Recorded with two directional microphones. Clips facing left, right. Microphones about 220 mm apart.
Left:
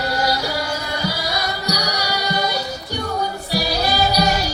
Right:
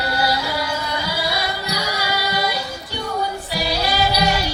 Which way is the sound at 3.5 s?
40° left (ahead or behind).